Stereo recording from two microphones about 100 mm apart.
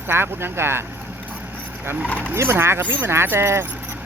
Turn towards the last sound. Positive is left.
turn(degrees=-25)  # may be behind; listen again after turning